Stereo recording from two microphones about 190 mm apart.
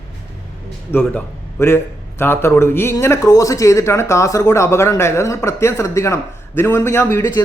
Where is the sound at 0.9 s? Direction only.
10° left (ahead or behind).